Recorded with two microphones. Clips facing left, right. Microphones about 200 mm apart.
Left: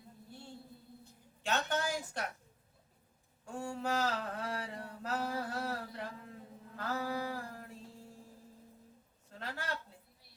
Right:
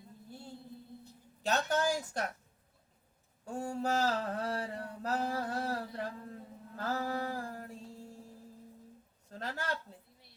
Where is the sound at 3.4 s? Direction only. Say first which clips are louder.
Right 3 dB; 40° right (ahead or behind).